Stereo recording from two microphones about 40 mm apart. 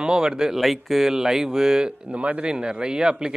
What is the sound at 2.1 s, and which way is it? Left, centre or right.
Speech, right.